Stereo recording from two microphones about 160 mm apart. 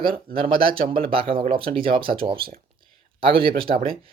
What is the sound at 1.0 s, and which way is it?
Speech, 35° right (ahead or behind).